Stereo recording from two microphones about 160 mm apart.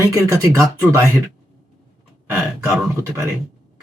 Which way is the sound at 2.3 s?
15° right (ahead or behind).